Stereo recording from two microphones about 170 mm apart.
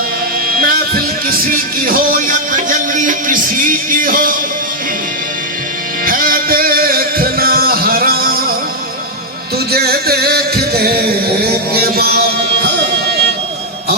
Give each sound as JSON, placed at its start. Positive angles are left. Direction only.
{"t": 0.4, "sound": "music", "side_deg": -60}
{"t": 6.1, "sound": "music", "side_deg": -55}
{"t": 9.7, "sound": "music", "side_deg": -65}